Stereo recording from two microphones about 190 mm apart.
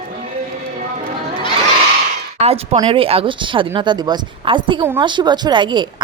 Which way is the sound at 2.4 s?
35° right (ahead or behind).